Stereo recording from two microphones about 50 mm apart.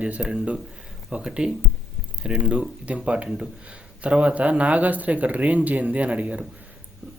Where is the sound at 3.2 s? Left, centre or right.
Centre.